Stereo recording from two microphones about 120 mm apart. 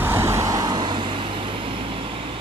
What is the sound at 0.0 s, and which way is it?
Vehicle, 20° right (ahead or behind).